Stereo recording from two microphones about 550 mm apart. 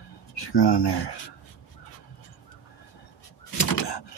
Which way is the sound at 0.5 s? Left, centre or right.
Left.